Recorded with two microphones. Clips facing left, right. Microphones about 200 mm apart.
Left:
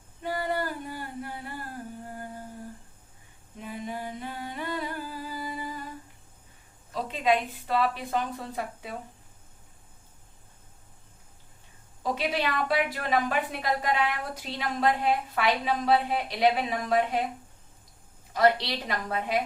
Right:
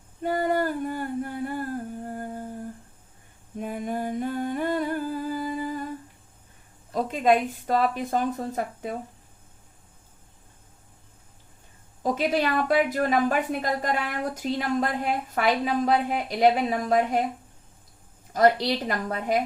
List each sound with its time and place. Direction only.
0.2 s a sound: 45° right (ahead or behind)
2.0 s humming: 45° right (ahead or behind)
3.6 s humming: 50° right (ahead or behind)
6.9 s a woman's voice: 50° right (ahead or behind)
12.0 s a woman's voice: 45° right (ahead or behind)
18.3 s a woman's voice: 45° right (ahead or behind)